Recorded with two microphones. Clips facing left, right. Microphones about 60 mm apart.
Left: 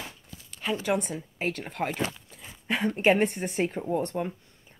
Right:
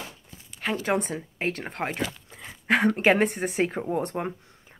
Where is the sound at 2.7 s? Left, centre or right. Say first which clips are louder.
Right 3 dB; right.